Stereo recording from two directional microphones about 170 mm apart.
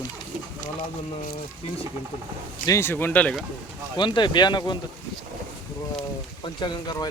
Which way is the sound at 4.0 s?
25° left (ahead or behind).